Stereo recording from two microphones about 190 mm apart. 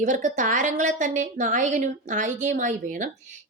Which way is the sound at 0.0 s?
40° right (ahead or behind).